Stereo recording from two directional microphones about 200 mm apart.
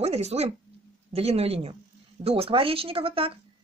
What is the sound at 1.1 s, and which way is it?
Speech, 30° right (ahead or behind).